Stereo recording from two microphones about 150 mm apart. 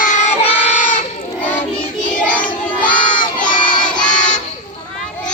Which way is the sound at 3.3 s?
65° left (ahead or behind).